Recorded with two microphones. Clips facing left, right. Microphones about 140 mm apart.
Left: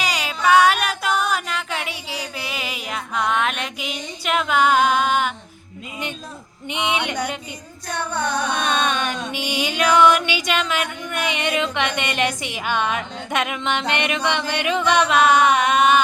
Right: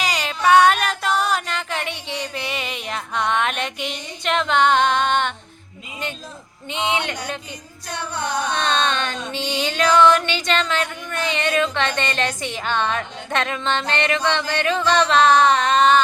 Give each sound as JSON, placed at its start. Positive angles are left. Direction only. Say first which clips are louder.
{"t": 0.0, "sound": "music", "louder": "right 1 dB", "side_deg": 5}
{"t": 6.7, "sound": "music", "louder": "even", "side_deg": 15}
{"t": 8.5, "sound": "music", "louder": "even", "side_deg": 10}